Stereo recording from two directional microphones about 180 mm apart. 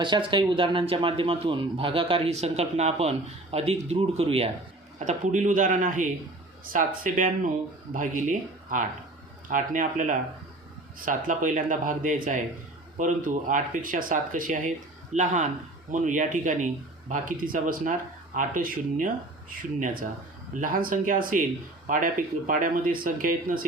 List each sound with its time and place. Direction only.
0.0 s speech: 25° right (ahead or behind); by 23.6 s 50° right (ahead or behind)